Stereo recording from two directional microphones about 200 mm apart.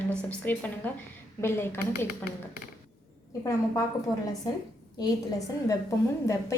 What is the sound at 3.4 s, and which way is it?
Speech, 15° left (ahead or behind).